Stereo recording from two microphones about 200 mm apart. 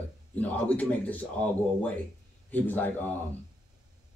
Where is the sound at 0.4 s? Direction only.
10° left (ahead or behind).